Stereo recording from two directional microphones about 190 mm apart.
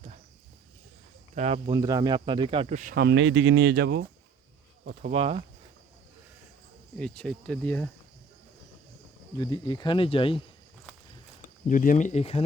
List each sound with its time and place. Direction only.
1.4 s speech: 35° right (ahead or behind)
1.7 s speech: 20° right (ahead or behind); by 2.9 s 35° right (ahead or behind)
2.9 s speech: 65° right (ahead or behind)
5.1 s speech: 35° right (ahead or behind)
6.9 s speech: 5° left (ahead or behind)
9.4 s speech: 25° left (ahead or behind)
11.7 s speech: 45° left (ahead or behind)